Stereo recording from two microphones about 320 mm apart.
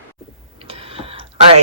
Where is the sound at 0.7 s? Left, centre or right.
Centre.